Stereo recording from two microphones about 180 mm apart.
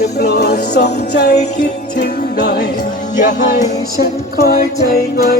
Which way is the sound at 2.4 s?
60° left (ahead or behind).